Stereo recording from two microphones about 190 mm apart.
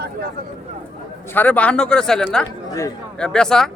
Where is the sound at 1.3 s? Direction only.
10° left (ahead or behind).